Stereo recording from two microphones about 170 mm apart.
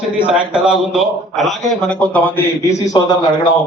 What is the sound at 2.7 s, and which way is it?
Speech, 20° left (ahead or behind).